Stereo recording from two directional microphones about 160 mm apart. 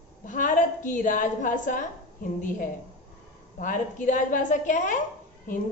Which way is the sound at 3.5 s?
55° left (ahead or behind).